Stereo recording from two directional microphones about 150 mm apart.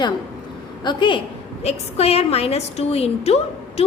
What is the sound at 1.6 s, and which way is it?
A woman's voice, 45° left (ahead or behind).